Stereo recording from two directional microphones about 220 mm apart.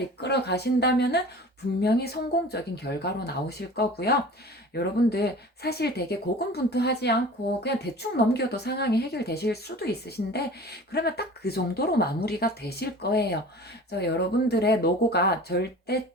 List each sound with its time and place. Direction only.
0.2 s speech: 50° left (ahead or behind)